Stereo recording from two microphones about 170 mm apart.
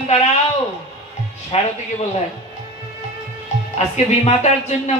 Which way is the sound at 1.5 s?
35° left (ahead or behind).